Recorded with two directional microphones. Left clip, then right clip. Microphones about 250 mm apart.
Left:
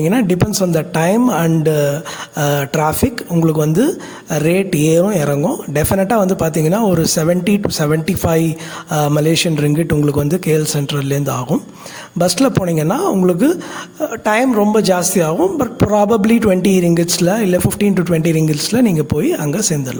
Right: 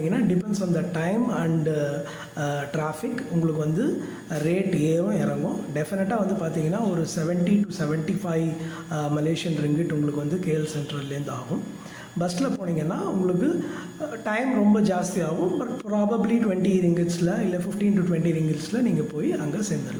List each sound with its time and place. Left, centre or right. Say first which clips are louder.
0.1 s speech: left 10 dB; left